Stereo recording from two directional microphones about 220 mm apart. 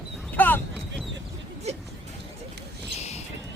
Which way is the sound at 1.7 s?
30° right (ahead or behind).